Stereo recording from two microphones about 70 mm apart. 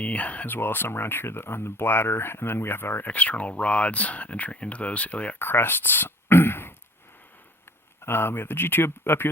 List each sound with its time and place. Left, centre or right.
0.0 s speech: left
3.1 s speech: centre
5.4 s a sound: left
8.0 s speech: left